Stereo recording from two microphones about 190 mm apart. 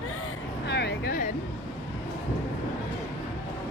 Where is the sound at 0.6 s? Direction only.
60° left (ahead or behind).